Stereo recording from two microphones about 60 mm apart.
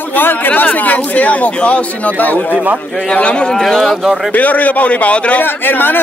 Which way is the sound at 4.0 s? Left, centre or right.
Centre.